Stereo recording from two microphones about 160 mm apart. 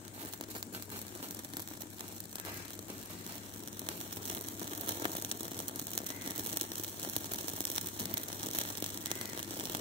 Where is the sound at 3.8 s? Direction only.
35° right (ahead or behind).